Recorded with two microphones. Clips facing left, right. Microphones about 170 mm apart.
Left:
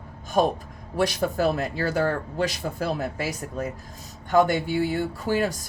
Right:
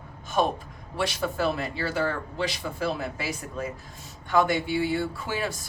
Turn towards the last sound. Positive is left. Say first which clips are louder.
# left 5 dB
turn(degrees=45)  # may be behind; listen again after turning